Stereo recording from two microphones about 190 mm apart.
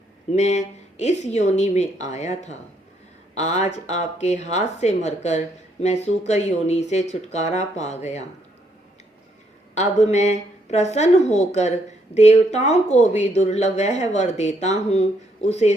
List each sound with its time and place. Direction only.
0.3 s speech: 35° left (ahead or behind)
9.7 s speech: 35° left (ahead or behind)